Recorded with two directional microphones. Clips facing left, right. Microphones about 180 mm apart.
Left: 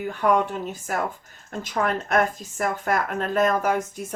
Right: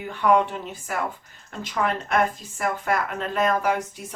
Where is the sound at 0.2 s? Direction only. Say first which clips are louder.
Right 2 dB; 45° left (ahead or behind).